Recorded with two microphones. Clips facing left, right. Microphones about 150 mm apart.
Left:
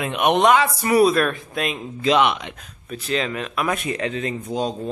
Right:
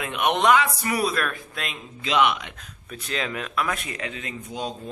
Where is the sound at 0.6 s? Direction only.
30° left (ahead or behind).